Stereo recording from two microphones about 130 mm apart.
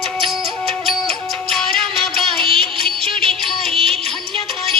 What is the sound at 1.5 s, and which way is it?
Music, 5° left (ahead or behind).